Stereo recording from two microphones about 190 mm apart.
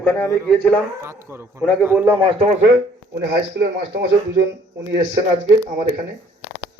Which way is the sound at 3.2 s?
60° right (ahead or behind).